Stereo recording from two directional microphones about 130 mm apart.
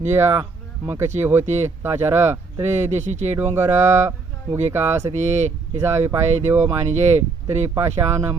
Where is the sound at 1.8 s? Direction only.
20° right (ahead or behind).